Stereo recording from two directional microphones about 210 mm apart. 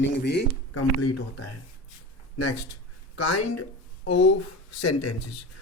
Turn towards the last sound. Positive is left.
turn(degrees=90)